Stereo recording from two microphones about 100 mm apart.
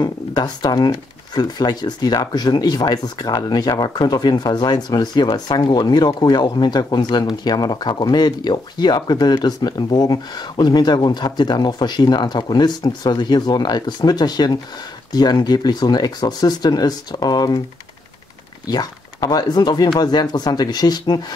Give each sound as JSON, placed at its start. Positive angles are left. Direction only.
{"t": 0.0, "sound": "speech", "side_deg": 45}
{"t": 18.7, "sound": "speech", "side_deg": 40}